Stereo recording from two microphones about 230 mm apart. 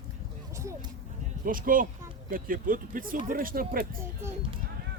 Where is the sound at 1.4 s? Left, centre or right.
Right.